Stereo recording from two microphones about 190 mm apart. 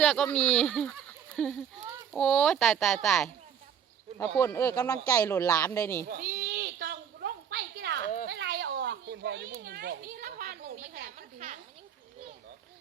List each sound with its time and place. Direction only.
0.0 s speech: 5° left (ahead or behind)
4.4 s speech: 15° left (ahead or behind)
6.1 s a sound: 55° right (ahead or behind)